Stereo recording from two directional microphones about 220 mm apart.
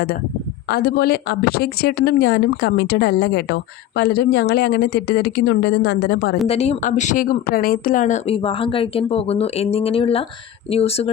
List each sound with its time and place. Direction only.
0.7 s a woman's voice: 45° left (ahead or behind)
6.5 s speech: 30° left (ahead or behind)